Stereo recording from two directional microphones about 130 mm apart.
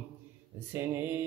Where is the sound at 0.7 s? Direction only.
15° right (ahead or behind).